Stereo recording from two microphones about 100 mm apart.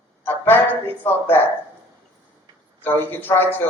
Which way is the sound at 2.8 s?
20° left (ahead or behind).